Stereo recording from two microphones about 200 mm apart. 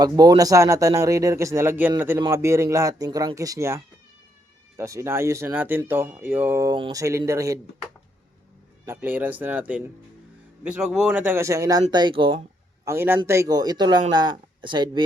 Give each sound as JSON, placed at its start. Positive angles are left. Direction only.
{"t": 0.0, "sound": "speech", "side_deg": -20}
{"t": 4.8, "sound": "speech", "side_deg": -15}
{"t": 8.8, "sound": "speech", "side_deg": -10}
{"t": 12.8, "sound": "a man's voice", "side_deg": -15}